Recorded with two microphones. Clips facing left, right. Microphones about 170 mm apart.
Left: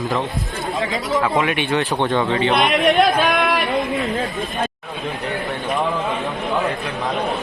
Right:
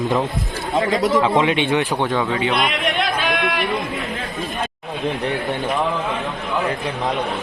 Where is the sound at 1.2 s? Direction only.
20° right (ahead or behind).